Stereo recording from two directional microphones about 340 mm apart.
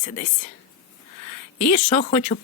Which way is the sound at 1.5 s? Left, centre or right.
Left.